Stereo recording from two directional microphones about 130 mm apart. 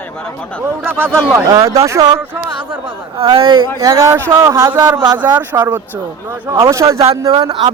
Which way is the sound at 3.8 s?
25° right (ahead or behind).